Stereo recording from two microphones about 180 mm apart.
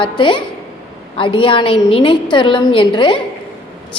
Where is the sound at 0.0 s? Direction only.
25° left (ahead or behind).